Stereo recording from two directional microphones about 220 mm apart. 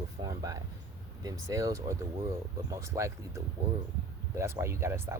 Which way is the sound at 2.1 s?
25° right (ahead or behind).